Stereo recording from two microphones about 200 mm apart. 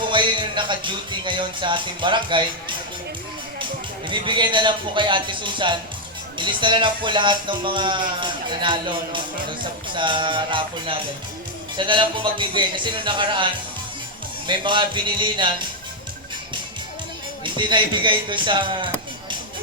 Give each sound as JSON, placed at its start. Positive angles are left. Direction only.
{"t": 0.1, "sound": "speech", "side_deg": -25}
{"t": 17.4, "sound": "speech", "side_deg": -25}